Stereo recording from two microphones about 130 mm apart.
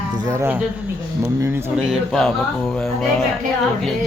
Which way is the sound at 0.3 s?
20° right (ahead or behind).